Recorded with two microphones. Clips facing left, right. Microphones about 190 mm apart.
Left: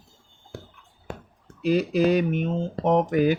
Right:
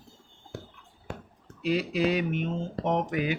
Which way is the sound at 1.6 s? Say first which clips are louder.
Left 5 dB; 45° left (ahead or behind).